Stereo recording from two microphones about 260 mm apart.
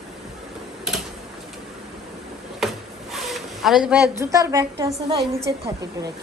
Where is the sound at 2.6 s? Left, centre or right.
Centre.